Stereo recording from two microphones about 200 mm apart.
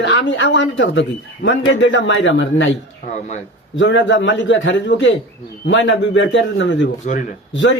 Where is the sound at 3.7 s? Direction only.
65° left (ahead or behind).